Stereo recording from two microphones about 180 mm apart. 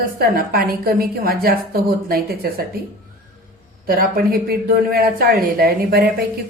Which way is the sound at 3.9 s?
55° right (ahead or behind).